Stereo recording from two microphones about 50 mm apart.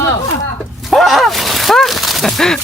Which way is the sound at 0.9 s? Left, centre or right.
Centre.